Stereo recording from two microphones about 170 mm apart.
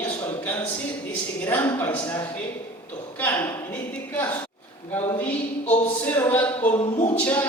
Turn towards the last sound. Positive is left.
turn(degrees=10)  # may be behind; listen again after turning